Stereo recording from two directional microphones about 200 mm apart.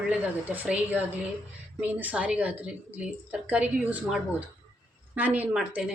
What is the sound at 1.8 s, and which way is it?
Speech, 10° right (ahead or behind).